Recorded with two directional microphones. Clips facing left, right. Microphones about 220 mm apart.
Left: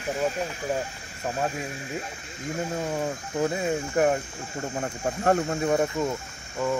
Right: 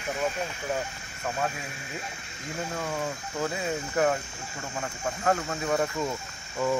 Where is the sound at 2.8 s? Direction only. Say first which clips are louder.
Left 3 dB; 20° left (ahead or behind).